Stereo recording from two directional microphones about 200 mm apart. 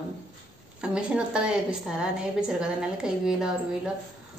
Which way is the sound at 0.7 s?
5° right (ahead or behind).